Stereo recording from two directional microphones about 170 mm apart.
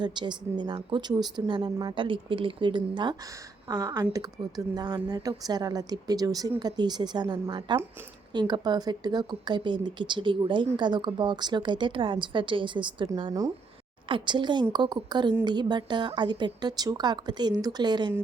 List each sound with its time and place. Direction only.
0.0 s speech: 25° right (ahead or behind)